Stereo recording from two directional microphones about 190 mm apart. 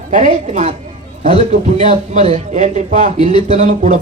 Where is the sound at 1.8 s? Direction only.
35° right (ahead or behind).